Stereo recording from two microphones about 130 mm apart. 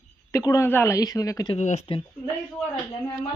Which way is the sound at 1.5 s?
60° left (ahead or behind).